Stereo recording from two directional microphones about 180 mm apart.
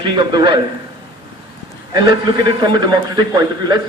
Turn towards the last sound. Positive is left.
turn(degrees=-25)  # may be behind; listen again after turning